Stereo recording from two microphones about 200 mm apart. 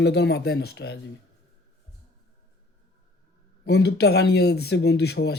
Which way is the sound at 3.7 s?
55° left (ahead or behind).